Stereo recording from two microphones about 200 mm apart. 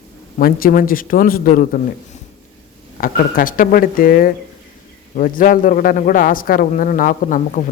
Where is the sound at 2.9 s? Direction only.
45° left (ahead or behind).